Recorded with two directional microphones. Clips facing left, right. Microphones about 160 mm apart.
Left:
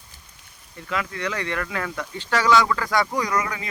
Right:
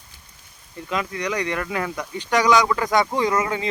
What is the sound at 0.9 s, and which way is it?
Speech, 20° right (ahead or behind).